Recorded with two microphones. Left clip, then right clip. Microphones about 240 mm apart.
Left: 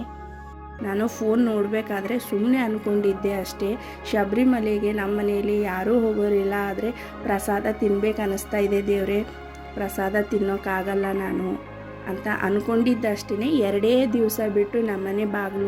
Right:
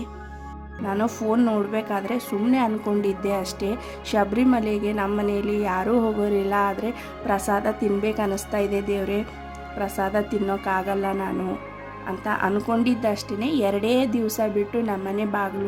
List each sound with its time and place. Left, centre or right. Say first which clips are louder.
0.9 s a woman's voice: even; centre